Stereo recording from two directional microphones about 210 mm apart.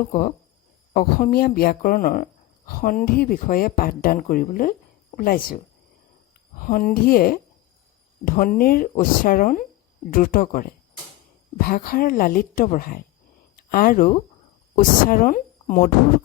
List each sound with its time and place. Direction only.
0.1 s speech: 35° left (ahead or behind)
6.6 s speech: 40° left (ahead or behind)